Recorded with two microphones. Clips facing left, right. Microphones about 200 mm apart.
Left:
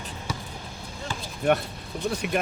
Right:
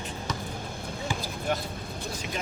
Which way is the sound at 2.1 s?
65° left (ahead or behind).